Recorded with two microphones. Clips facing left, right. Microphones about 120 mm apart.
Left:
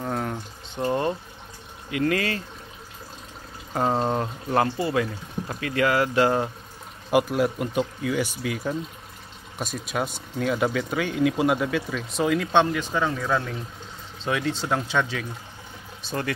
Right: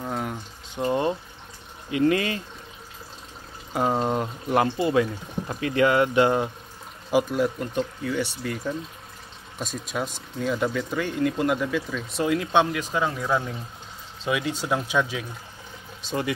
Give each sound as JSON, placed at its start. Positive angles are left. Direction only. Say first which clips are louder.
{"t": 0.0, "sound": "a sound", "louder": "left 2 dB", "side_deg": -5}
{"t": 0.7, "sound": "boiling", "louder": "right 1 dB", "side_deg": -15}
{"t": 1.9, "sound": "speech", "louder": "right 2 dB", "side_deg": -25}
{"t": 3.7, "sound": "speech", "louder": "even", "side_deg": -5}
{"t": 7.1, "sound": "speech", "louder": "left 1 dB", "side_deg": 0}
{"t": 9.6, "sound": "speech", "louder": "left 2 dB", "side_deg": 5}